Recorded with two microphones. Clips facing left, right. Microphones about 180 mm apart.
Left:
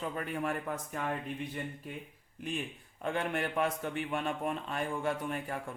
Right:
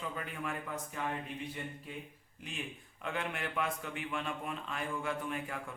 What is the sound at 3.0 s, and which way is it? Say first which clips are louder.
A man's voice: left 5 dB; 40° left (ahead or behind).